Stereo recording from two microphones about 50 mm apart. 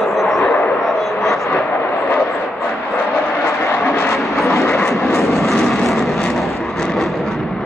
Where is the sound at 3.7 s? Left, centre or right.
Left.